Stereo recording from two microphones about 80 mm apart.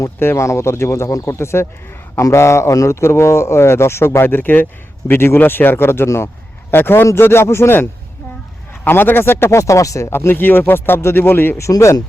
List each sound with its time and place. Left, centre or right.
0.0 s a man's voice: left
10.1 s speech: left